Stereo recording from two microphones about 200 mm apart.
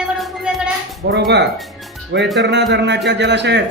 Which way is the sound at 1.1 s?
60° right (ahead or behind).